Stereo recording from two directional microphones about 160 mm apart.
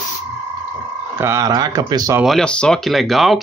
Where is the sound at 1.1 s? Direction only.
20° right (ahead or behind).